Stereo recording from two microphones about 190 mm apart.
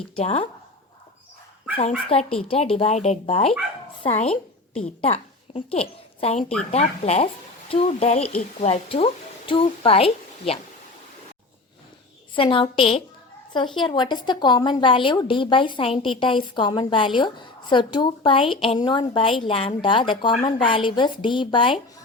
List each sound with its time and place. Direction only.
0.2 s speech: 35° left (ahead or behind)
2.0 s a woman's voice: 30° left (ahead or behind)
12.3 s a woman's voice: 25° left (ahead or behind)